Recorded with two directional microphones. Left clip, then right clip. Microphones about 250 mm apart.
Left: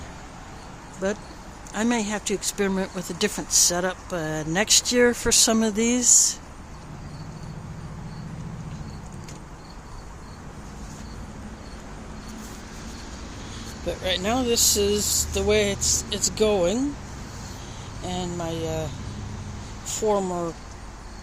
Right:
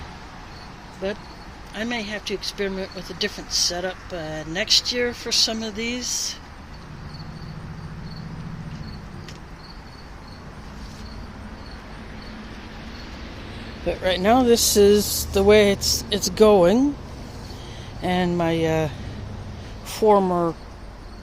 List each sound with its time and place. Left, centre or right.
1.7 s speech: left
13.8 s speech: centre
18.0 s speech: right
20.0 s speech: right